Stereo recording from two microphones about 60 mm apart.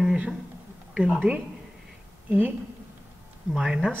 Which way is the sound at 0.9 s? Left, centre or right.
Centre.